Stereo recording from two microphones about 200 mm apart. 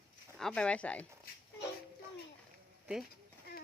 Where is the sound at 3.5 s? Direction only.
50° left (ahead or behind).